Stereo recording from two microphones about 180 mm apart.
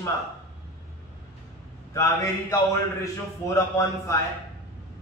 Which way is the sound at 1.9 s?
15° left (ahead or behind).